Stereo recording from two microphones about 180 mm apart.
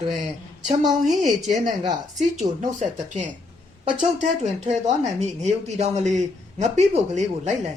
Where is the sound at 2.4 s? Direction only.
40° right (ahead or behind).